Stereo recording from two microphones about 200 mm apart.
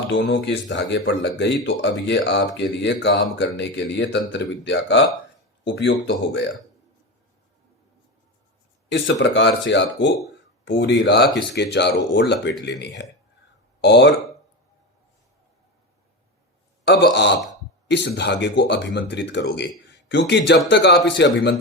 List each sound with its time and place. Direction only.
0.1 s speech: 65° left (ahead or behind)
8.9 s speech: 65° left (ahead or behind)
16.8 s speech: 55° left (ahead or behind)